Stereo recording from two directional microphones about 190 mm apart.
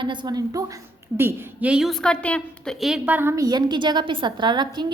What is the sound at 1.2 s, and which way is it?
A woman's voice, 10° right (ahead or behind).